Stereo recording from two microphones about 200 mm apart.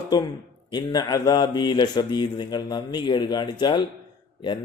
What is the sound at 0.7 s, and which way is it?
Speech, 20° left (ahead or behind).